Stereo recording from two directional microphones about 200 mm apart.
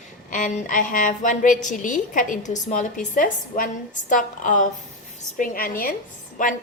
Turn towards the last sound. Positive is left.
turn(degrees=40)  # may be behind; listen again after turning